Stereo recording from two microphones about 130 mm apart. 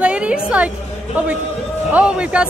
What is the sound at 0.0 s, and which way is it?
A woman's voice, 10° right (ahead or behind).